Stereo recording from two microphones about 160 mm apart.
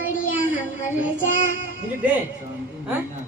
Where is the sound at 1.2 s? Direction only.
55° left (ahead or behind).